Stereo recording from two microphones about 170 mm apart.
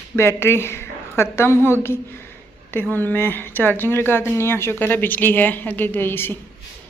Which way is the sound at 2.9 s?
10° left (ahead or behind).